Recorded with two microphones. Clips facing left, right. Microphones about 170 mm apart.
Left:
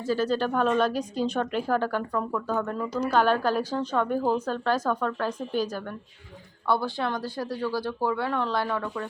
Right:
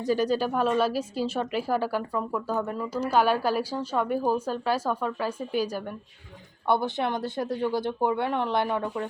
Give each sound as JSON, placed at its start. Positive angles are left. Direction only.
{"t": 0.0, "sound": "a woman's voice", "side_deg": -15}